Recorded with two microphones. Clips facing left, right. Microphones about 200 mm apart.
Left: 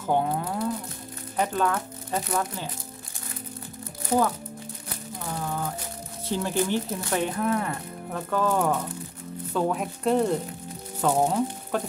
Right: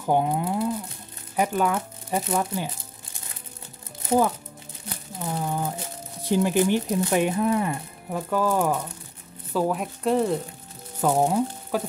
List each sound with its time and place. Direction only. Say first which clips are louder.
0.0 s speech: right 2 dB; 15° right (ahead or behind)
4.1 s speech: right 2 dB; 25° right (ahead or behind)
5.2 s a sound: right 3 dB; 20° right (ahead or behind)
6.2 s speech: right 5 dB; 15° right (ahead or behind)